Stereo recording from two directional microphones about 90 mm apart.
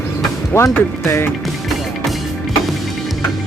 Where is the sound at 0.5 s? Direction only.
30° left (ahead or behind).